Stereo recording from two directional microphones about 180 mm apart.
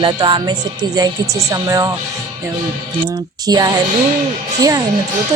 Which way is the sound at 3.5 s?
20° right (ahead or behind).